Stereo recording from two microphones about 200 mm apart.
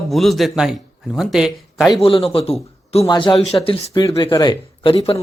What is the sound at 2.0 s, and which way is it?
A man's voice, 25° left (ahead or behind).